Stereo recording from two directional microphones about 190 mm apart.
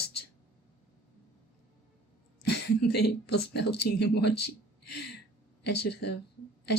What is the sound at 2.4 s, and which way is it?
Speech, 60° left (ahead or behind).